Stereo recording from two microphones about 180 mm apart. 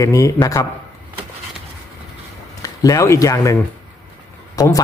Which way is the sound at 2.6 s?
20° left (ahead or behind).